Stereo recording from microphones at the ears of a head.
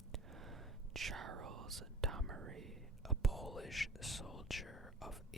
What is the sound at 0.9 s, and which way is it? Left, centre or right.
Whispering, right.